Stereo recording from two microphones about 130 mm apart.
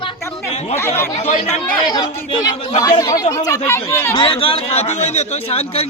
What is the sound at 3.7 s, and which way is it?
Speech, 15° left (ahead or behind).